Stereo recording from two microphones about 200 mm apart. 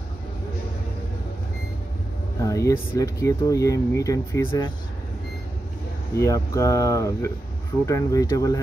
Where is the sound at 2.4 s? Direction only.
15° left (ahead or behind).